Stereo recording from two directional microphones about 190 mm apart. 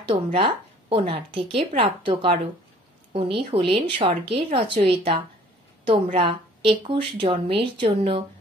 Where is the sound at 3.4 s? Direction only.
30° right (ahead or behind).